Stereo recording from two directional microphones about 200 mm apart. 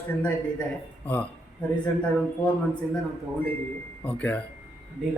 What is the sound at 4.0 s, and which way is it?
Speech, 5° left (ahead or behind).